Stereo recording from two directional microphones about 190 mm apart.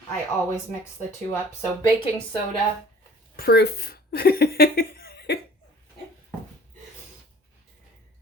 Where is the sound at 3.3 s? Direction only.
55° left (ahead or behind).